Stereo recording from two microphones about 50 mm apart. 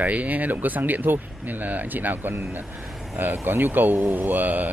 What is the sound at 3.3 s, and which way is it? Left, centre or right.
Speech, right.